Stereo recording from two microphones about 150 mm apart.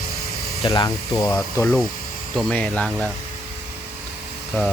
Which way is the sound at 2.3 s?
5° left (ahead or behind).